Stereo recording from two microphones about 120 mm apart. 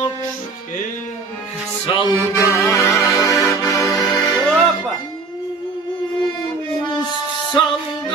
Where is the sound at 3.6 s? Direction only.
25° left (ahead or behind).